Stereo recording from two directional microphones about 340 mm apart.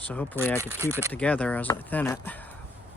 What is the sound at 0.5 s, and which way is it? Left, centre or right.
Speech, centre.